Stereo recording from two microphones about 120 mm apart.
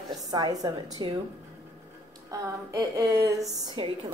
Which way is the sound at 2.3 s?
30° right (ahead or behind).